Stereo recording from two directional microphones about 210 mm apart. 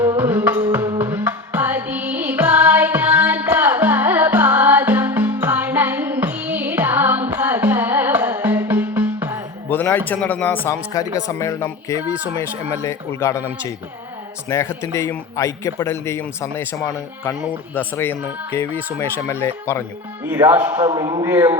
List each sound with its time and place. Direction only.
0.0 s music: 10° right (ahead or behind)
9.6 s speech: 10° left (ahead or behind)
17.7 s speech: 10° left (ahead or behind)
20.4 s speech: 10° right (ahead or behind)
20.8 s a man's voice: 20° right (ahead or behind)